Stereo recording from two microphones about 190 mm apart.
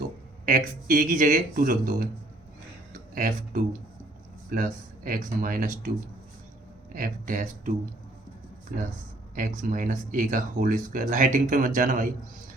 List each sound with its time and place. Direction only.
0.4 s speech: 45° right (ahead or behind)
3.2 s speech: 45° right (ahead or behind)
6.9 s speech: 45° right (ahead or behind)
9.6 s speech: 45° right (ahead or behind)